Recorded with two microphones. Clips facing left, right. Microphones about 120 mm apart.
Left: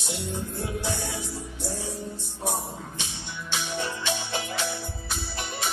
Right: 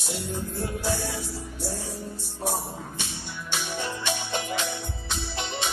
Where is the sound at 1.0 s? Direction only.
15° left (ahead or behind).